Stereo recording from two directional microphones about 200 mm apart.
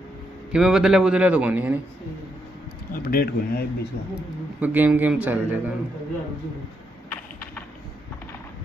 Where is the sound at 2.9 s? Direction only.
45° left (ahead or behind).